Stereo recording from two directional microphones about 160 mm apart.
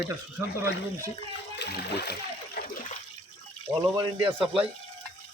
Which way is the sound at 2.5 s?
65° left (ahead or behind).